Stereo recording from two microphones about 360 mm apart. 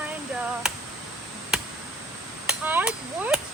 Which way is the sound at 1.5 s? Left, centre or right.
Centre.